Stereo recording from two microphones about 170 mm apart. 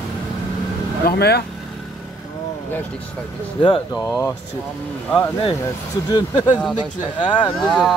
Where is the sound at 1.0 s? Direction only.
70° left (ahead or behind).